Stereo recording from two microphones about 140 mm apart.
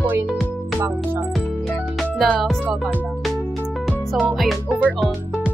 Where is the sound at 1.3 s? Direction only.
Centre (ahead or behind).